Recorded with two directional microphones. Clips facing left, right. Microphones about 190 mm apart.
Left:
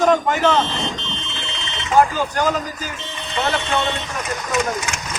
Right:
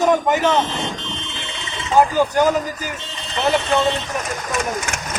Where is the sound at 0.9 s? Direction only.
25° left (ahead or behind).